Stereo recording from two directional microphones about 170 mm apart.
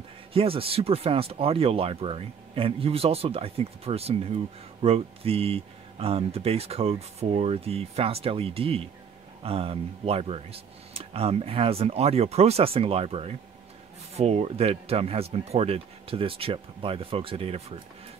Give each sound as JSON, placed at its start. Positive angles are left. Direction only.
{"t": 0.3, "sound": "speech", "side_deg": -35}